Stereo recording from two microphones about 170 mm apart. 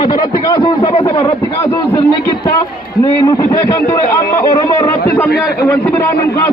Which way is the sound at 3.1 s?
20° left (ahead or behind).